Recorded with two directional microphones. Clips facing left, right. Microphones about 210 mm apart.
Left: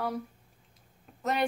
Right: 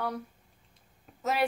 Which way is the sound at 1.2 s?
5° right (ahead or behind).